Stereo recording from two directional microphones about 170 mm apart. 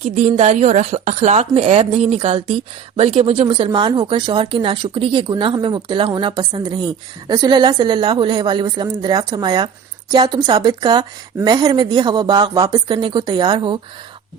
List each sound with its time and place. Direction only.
0.0 s speech: 45° right (ahead or behind); by 13.7 s 25° right (ahead or behind)